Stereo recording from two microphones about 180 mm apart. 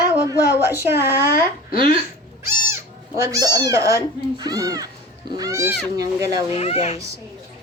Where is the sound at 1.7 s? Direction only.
25° right (ahead or behind).